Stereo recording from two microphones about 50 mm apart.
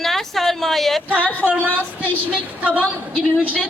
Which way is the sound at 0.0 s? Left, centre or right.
Centre.